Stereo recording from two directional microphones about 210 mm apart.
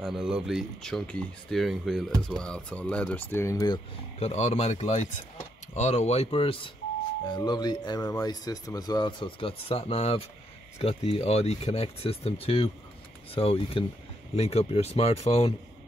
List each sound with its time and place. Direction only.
0.0 s speech: 5° right (ahead or behind); by 15.5 s 30° left (ahead or behind)